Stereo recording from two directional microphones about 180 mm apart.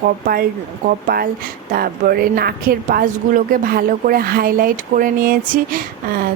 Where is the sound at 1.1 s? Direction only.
55° right (ahead or behind).